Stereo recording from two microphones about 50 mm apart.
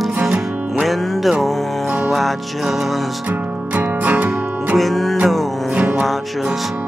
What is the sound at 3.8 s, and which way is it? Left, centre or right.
Music, right.